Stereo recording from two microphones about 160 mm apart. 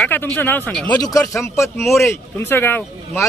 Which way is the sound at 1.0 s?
20° left (ahead or behind).